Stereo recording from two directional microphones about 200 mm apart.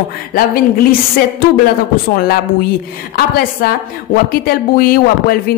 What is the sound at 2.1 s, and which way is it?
A woman's voice, 50° left (ahead or behind).